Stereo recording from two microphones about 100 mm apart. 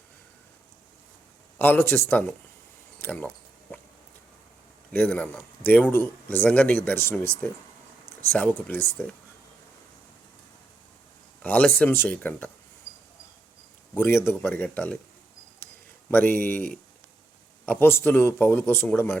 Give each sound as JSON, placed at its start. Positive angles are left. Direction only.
{"t": 1.5, "sound": "speech", "side_deg": 20}
{"t": 4.9, "sound": "speech", "side_deg": 15}
{"t": 11.4, "sound": "speech", "side_deg": 15}
{"t": 13.9, "sound": "speech", "side_deg": 20}